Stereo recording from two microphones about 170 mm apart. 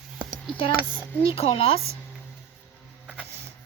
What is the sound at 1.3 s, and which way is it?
Speech, 35° left (ahead or behind).